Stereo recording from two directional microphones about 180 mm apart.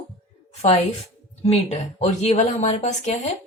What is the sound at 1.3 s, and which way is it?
A woman's voice, 35° left (ahead or behind).